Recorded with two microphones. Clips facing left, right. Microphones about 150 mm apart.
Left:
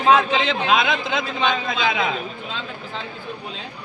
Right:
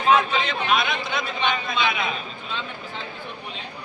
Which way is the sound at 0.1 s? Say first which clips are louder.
Left 3 dB; 90° left.